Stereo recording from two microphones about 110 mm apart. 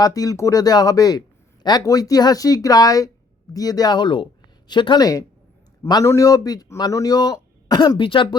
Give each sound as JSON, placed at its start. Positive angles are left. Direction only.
{"t": 0.0, "sound": "a man's voice", "side_deg": 35}
{"t": 5.9, "sound": "a man's voice", "side_deg": 30}